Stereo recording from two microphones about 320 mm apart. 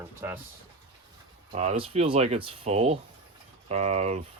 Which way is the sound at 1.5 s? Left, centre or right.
Centre.